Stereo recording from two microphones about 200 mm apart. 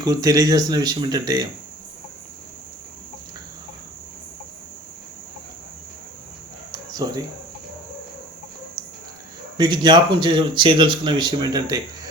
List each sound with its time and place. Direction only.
0.0 s speech: 20° right (ahead or behind)
6.7 s cricket: 20° right (ahead or behind)
9.6 s speech: 20° right (ahead or behind)